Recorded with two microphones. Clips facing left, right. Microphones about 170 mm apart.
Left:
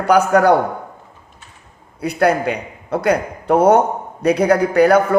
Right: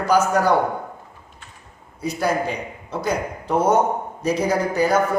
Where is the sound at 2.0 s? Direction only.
65° left (ahead or behind).